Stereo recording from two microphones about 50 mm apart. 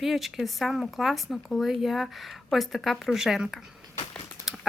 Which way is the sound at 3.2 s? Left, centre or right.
Centre.